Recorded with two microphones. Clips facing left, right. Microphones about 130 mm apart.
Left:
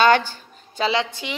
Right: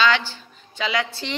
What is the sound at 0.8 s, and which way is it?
Speech, 30° left (ahead or behind).